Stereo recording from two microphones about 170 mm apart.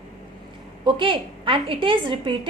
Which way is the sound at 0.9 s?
30° right (ahead or behind).